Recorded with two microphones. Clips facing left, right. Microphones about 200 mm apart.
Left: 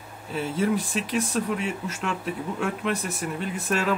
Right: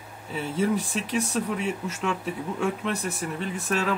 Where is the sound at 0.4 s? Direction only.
5° left (ahead or behind).